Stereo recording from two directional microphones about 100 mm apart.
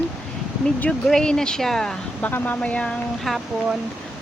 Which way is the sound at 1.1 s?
5° left (ahead or behind).